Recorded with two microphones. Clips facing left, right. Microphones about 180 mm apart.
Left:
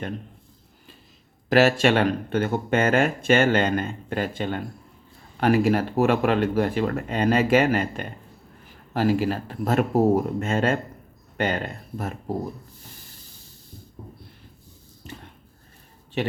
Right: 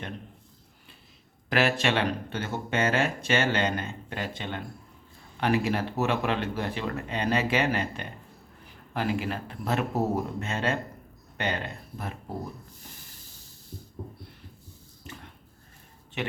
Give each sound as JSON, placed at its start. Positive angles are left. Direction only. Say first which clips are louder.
{"t": 1.5, "sound": "speech", "louder": "left 7 dB", "side_deg": 40}